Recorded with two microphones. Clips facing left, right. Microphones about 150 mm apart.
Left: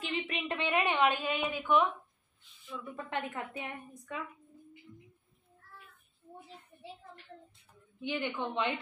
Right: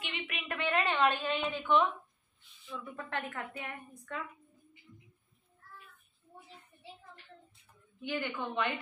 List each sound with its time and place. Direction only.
0.0 s a woman's voice: 35° left (ahead or behind); by 2.9 s centre (ahead or behind)
3.1 s a woman's voice: 15° left (ahead or behind)
8.0 s a woman's voice: 20° left (ahead or behind)